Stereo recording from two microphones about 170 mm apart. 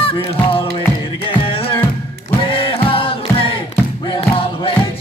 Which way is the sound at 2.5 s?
30° left (ahead or behind).